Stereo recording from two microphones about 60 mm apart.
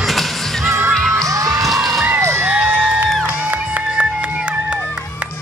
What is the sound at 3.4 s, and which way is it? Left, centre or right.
Music, right.